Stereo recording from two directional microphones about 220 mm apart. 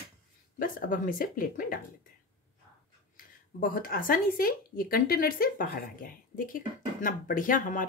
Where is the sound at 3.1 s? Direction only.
40° left (ahead or behind).